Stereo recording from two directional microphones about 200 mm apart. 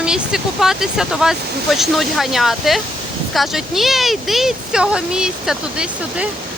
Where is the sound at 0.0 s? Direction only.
5° right (ahead or behind).